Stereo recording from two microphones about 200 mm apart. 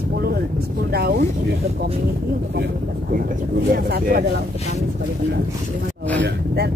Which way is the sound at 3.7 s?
50° right (ahead or behind).